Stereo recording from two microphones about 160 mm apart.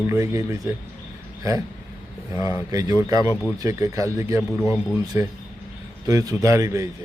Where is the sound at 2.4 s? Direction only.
20° right (ahead or behind).